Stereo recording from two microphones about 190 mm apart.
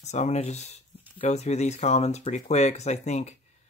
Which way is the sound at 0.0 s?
35° left (ahead or behind).